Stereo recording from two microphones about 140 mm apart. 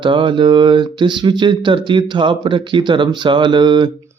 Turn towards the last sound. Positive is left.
turn(degrees=-35)  # may be behind; listen again after turning